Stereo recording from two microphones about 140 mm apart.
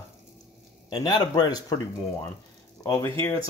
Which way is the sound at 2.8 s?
20° left (ahead or behind).